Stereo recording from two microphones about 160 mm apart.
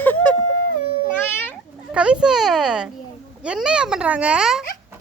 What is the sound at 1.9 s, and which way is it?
A child's voice, 5° right (ahead or behind).